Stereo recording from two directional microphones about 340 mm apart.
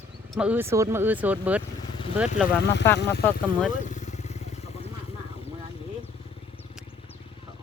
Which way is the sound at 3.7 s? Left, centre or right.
Left.